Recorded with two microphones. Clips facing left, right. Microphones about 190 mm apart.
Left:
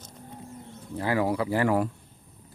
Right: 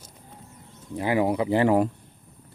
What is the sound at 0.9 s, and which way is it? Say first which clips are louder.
Speech: right 3 dB; 20° right (ahead or behind).